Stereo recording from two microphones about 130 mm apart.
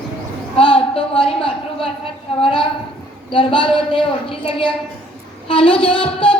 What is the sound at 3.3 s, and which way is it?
A woman's voice, 40° left (ahead or behind).